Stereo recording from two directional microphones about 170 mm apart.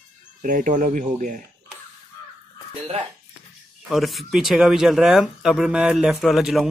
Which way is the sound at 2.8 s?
35° right (ahead or behind).